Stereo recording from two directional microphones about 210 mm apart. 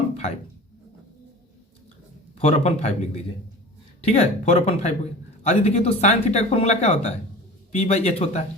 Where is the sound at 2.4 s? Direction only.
30° left (ahead or behind).